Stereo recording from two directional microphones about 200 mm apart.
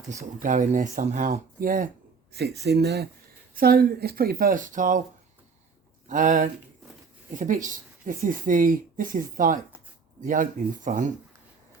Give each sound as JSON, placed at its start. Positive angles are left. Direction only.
{"t": 0.3, "sound": "speech", "side_deg": -40}
{"t": 6.1, "sound": "speech", "side_deg": -40}